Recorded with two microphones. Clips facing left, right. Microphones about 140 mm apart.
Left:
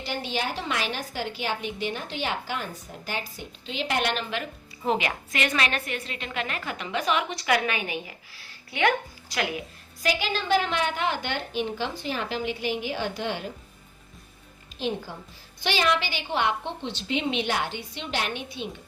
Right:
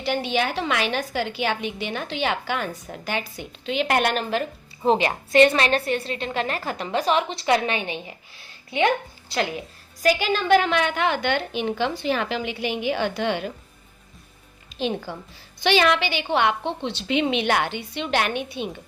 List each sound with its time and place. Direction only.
0.0 s a woman's voice: 65° right (ahead or behind); by 9.5 s 30° right (ahead or behind)
10.0 s a woman's voice: 50° right (ahead or behind); by 13.5 s 75° right (ahead or behind)
14.7 s a woman's voice: 85° right
15.6 s a woman's voice: 75° right (ahead or behind); by 18.7 s 55° right (ahead or behind)